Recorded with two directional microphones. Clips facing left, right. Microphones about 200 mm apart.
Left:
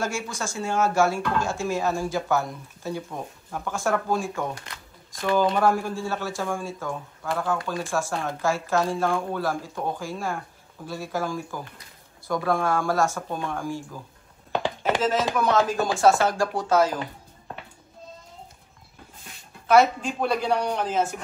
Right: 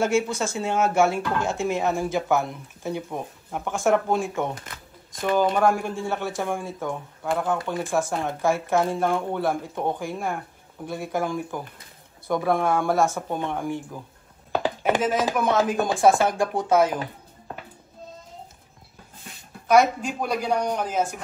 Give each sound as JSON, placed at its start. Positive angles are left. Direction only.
{"t": 0.0, "sound": "speech", "side_deg": -20}
{"t": 12.8, "sound": "speech", "side_deg": 0}
{"t": 13.3, "sound": "speech", "side_deg": -20}
{"t": 14.5, "sound": "chopping", "side_deg": -5}
{"t": 15.8, "sound": "speech", "side_deg": -15}
{"t": 20.0, "sound": "speech", "side_deg": -5}